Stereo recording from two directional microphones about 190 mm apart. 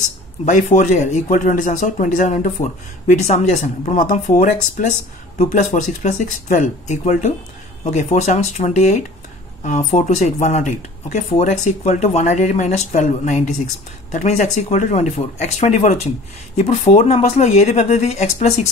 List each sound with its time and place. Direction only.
0.5 s speech: 40° left (ahead or behind)